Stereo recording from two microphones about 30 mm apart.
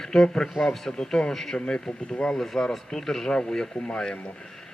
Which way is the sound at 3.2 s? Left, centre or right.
Left.